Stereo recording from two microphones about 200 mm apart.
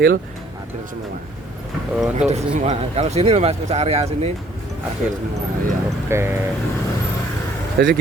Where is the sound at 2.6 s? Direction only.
35° right (ahead or behind).